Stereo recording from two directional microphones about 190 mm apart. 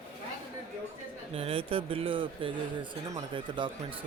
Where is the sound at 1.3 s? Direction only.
30° right (ahead or behind).